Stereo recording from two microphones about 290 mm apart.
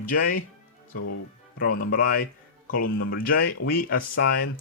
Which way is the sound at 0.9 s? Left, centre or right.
Left.